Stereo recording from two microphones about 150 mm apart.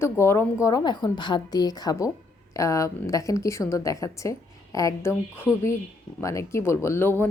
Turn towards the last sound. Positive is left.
turn(degrees=15)  # may be behind; listen again after turning